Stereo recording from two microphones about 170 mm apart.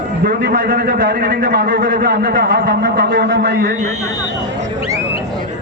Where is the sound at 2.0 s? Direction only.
70° right (ahead or behind).